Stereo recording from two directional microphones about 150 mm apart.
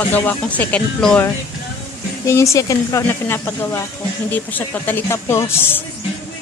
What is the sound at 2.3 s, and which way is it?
Speech, 20° left (ahead or behind).